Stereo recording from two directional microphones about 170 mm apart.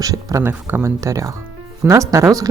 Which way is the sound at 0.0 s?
20° right (ahead or behind).